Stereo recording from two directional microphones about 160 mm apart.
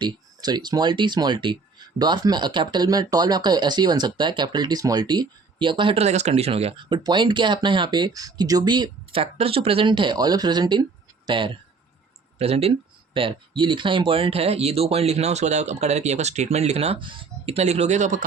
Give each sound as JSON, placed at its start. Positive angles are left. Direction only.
{"t": 0.0, "sound": "speech", "side_deg": -25}